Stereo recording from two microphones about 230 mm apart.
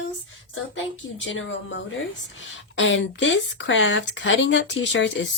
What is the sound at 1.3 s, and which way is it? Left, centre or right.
Speech, left.